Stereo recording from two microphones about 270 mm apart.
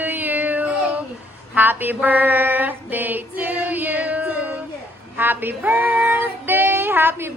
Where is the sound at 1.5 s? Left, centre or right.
Centre.